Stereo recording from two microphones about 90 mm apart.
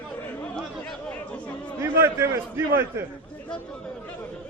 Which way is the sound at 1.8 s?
30° right (ahead or behind).